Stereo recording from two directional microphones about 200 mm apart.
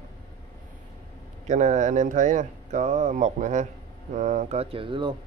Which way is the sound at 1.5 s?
35° right (ahead or behind).